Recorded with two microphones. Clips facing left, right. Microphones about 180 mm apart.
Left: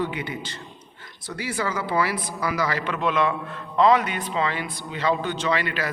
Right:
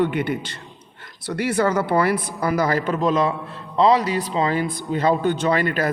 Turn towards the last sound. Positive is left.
turn(degrees=-50)  # may be behind; listen again after turning